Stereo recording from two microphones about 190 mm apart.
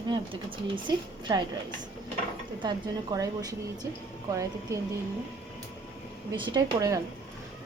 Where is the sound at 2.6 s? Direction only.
20° right (ahead or behind).